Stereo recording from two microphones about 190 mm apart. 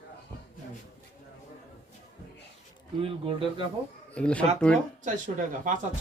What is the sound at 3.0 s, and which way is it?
Speech, 25° right (ahead or behind).